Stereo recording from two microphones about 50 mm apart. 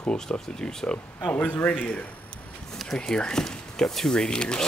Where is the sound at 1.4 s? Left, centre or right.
Left.